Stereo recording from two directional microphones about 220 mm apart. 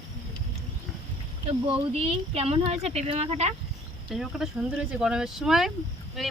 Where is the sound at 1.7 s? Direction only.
25° right (ahead or behind).